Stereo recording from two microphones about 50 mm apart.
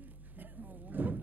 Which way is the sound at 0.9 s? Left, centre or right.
Right.